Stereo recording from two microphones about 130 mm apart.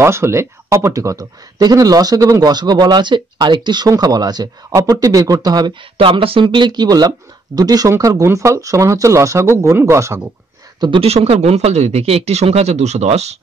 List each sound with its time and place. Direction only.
0.0 s speech: 20° right (ahead or behind)
5.9 s speech: 45° right (ahead or behind); by 10.2 s 20° right (ahead or behind)
10.8 s speech: 45° right (ahead or behind)